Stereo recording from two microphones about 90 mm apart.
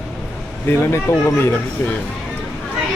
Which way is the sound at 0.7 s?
30° left (ahead or behind).